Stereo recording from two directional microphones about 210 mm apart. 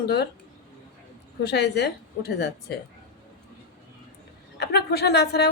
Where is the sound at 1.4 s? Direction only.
50° left (ahead or behind).